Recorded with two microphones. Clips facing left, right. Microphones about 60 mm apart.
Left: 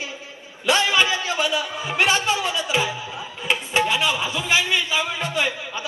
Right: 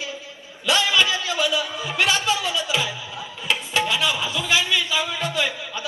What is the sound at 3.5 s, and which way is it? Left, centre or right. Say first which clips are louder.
Music: left 2 dB; left.